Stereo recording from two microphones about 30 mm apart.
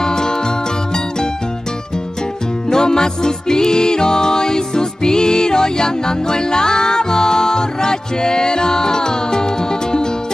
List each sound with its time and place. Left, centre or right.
0.0 s music: left
2.7 s music: left